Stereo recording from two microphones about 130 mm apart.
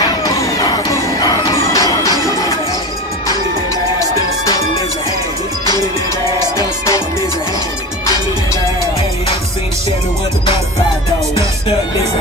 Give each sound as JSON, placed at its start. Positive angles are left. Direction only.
{"t": 0.0, "sound": "music", "side_deg": 30}